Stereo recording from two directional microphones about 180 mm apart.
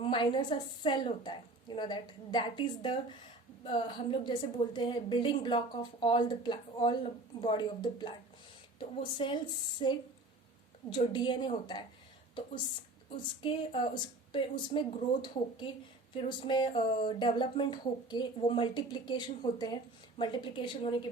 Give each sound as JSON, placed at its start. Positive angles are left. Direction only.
{"t": 0.0, "sound": "speech", "side_deg": 25}
{"t": 13.4, "sound": "speech", "side_deg": 30}